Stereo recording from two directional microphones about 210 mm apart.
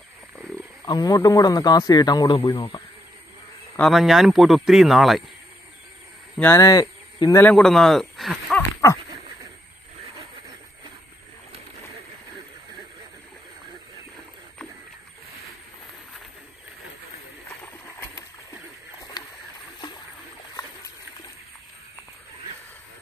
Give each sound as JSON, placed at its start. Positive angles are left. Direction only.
{"t": 0.8, "sound": "speech", "side_deg": 15}
{"t": 3.7, "sound": "speech", "side_deg": 0}
{"t": 6.3, "sound": "speech", "side_deg": 10}
{"t": 19.2, "sound": "rowboat", "side_deg": 20}